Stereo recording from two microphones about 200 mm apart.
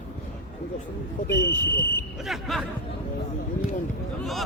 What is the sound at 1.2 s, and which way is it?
Speech, 40° left (ahead or behind).